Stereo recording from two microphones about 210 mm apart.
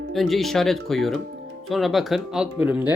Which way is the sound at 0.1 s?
Centre (ahead or behind).